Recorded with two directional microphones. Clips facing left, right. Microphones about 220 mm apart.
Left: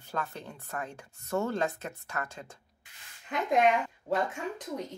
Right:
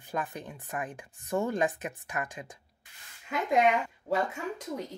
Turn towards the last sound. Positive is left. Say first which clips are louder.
# even
turn(degrees=0)  # may be behind; listen again after turning